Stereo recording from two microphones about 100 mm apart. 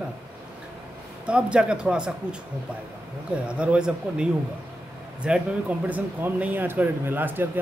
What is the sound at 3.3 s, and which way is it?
Speech, 10° right (ahead or behind).